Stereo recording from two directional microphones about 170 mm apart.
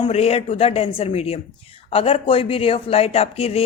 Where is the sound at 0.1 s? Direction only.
35° left (ahead or behind).